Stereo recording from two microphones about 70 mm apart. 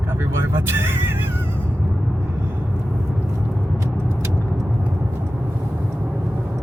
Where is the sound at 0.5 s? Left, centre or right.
Right.